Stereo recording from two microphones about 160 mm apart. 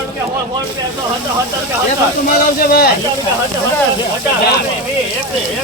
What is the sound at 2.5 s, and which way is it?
Speech, 65° left (ahead or behind).